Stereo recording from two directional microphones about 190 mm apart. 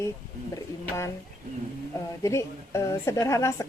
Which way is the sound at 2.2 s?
15° left (ahead or behind).